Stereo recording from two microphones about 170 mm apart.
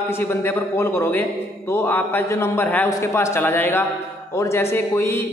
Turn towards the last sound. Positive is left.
turn(degrees=15)  # may be behind; listen again after turning